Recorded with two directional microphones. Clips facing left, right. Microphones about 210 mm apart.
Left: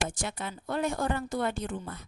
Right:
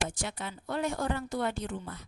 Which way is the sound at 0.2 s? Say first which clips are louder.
Left 2 dB; 50° left (ahead or behind).